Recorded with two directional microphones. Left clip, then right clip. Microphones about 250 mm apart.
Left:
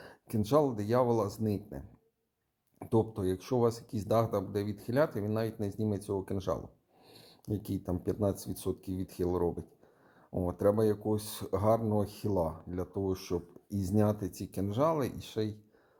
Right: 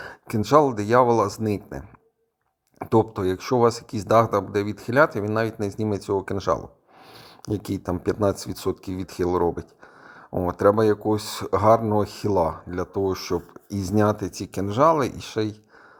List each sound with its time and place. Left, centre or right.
0.0 s speech: centre